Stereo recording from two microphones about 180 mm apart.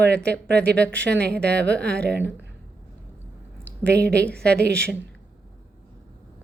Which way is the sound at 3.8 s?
70° right (ahead or behind).